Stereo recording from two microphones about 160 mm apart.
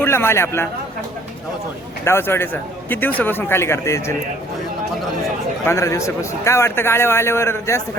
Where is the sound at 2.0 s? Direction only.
15° left (ahead or behind).